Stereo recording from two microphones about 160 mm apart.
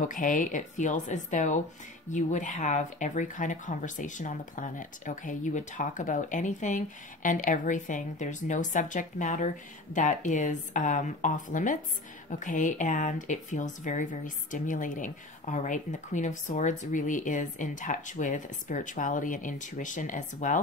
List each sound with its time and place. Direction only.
0.0 s speech: 55° left (ahead or behind)